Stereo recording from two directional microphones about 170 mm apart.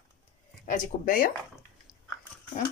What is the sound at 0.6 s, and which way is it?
Speech, 50° left (ahead or behind).